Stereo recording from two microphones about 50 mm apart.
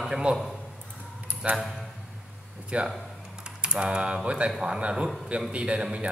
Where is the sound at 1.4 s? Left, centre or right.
Centre.